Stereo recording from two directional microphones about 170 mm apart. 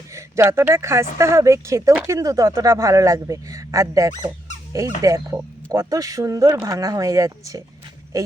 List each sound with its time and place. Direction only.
0.1 s speech: 15° right (ahead or behind)